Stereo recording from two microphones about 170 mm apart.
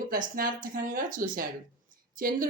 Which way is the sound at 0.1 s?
55° right (ahead or behind).